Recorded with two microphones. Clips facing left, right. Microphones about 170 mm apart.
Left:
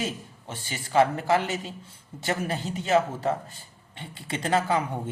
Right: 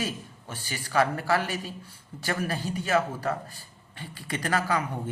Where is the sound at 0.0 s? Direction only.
25° left (ahead or behind).